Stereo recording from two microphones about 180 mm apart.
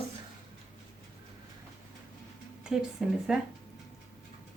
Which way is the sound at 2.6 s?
5° right (ahead or behind).